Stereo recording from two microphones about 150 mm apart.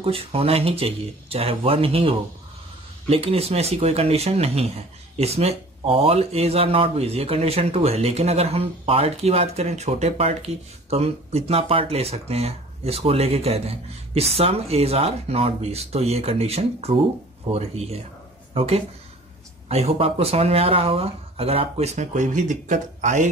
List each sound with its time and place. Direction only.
0.0 s speech: 40° right (ahead or behind); by 23.2 s 55° right (ahead or behind)